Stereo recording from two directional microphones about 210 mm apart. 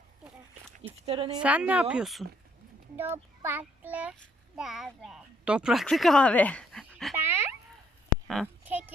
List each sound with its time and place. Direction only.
1.0 s speech: 25° right (ahead or behind)
1.4 s a child's voice: 5° right (ahead or behind)
7.3 s a sound: 10° right (ahead or behind)